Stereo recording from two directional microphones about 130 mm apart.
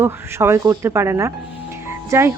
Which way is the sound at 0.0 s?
20° right (ahead or behind).